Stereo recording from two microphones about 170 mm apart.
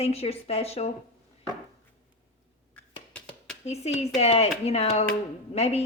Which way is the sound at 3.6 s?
40° left (ahead or behind).